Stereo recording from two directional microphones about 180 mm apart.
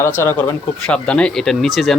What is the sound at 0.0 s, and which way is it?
Speech, 15° left (ahead or behind).